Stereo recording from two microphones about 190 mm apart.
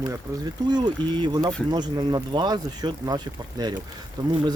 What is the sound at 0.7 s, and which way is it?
Speech, 25° right (ahead or behind).